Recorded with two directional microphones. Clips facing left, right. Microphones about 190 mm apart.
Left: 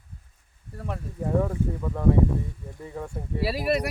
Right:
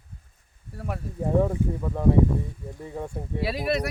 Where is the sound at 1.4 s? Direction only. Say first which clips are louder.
Right 2 dB; 15° right (ahead or behind).